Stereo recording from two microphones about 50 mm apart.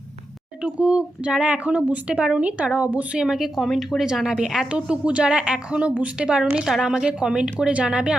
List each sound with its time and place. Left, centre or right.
0.6 s speech: right
3.2 s a woman's voice: centre
4.7 s a woman's voice: right